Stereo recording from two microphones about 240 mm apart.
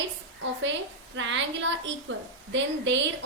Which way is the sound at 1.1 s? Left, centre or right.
Right.